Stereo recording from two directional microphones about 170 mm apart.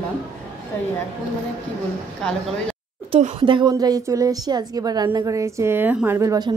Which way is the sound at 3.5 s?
25° right (ahead or behind).